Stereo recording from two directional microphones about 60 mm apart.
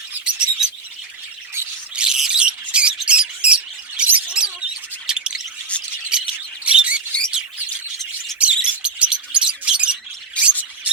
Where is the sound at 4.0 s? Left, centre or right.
Centre.